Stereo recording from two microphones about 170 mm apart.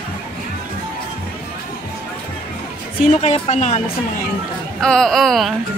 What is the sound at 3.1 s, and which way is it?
Speech, 35° left (ahead or behind).